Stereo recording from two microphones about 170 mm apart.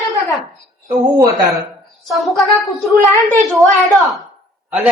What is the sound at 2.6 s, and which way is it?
Speech, 20° left (ahead or behind).